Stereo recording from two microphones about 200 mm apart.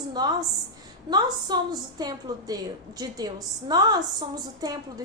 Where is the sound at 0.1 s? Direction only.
20° right (ahead or behind).